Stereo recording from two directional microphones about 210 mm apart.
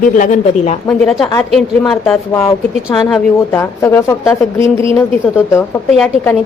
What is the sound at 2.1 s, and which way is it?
Speech, 15° left (ahead or behind).